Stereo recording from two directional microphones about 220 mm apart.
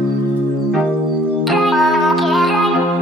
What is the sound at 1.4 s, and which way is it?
Music, centre (ahead or behind).